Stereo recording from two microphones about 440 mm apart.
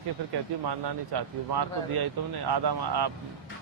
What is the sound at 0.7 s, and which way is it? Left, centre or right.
Speech, right.